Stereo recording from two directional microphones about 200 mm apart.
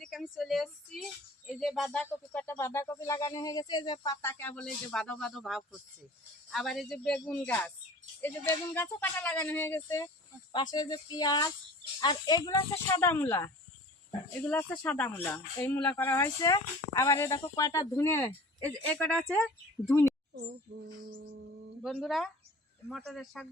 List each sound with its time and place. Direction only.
0.0 s a woman's voice: centre (ahead or behind)
21.8 s speech: centre (ahead or behind)